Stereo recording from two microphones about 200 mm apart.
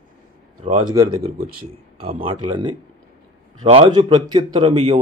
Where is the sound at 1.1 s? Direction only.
45° right (ahead or behind).